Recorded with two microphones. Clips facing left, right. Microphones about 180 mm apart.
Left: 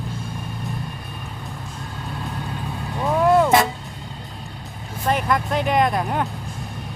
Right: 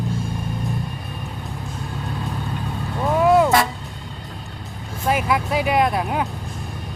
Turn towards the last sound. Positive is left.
turn(degrees=0)  # may be behind; listen again after turning